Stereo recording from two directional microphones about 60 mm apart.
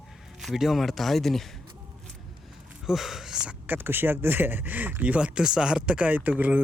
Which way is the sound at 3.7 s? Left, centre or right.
Right.